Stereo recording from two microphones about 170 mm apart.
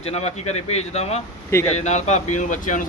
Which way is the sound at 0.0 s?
40° left (ahead or behind).